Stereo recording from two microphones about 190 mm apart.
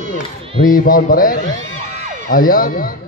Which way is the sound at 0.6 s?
50° left (ahead or behind).